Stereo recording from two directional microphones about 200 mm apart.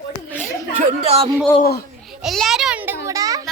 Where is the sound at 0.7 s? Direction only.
30° right (ahead or behind).